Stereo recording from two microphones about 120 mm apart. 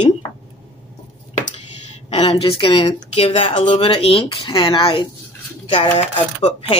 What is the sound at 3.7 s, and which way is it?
Speech, 50° left (ahead or behind).